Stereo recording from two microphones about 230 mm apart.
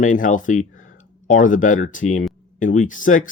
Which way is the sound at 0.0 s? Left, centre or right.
Left.